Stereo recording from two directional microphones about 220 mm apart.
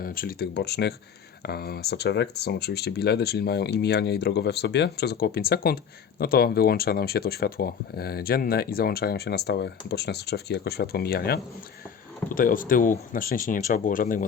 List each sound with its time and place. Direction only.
0.0 s speech: 40° left (ahead or behind)